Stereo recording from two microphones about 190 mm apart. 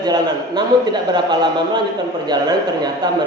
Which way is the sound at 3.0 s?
20° right (ahead or behind).